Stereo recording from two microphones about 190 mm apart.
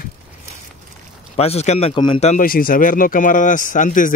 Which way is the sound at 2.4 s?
50° left (ahead or behind).